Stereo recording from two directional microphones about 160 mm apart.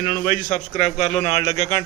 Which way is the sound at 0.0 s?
55° left (ahead or behind).